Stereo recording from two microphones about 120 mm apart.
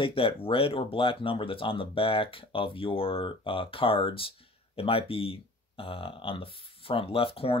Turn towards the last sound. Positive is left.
turn(degrees=50)  # may be behind; listen again after turning